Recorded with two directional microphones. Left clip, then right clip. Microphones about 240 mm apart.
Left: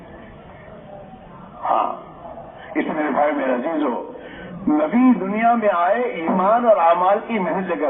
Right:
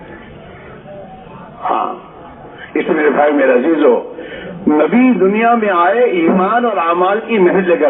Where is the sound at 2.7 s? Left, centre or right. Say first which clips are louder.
Right 8 dB; right.